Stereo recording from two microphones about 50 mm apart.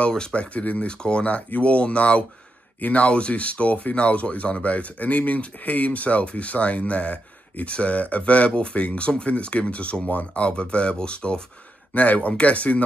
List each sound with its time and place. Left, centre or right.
0.3 s speech: left
11.9 s speech: left